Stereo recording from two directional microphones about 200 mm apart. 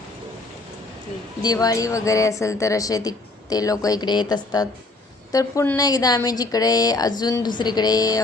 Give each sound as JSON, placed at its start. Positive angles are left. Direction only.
{"t": 1.4, "sound": "a woman's voice", "side_deg": 20}